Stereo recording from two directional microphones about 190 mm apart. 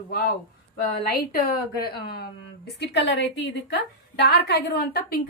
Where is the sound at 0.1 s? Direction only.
50° left (ahead or behind).